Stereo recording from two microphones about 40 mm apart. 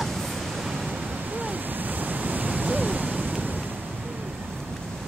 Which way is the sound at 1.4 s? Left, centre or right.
Right.